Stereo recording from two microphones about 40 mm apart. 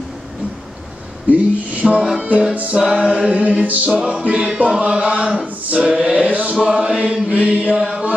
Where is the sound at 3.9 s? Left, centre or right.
Right.